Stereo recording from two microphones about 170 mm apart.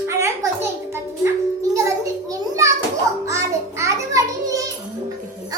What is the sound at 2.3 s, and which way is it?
Children playing, 20° right (ahead or behind).